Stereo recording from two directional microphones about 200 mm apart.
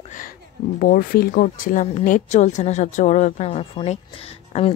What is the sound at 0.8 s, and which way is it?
Speech, 45° left (ahead or behind).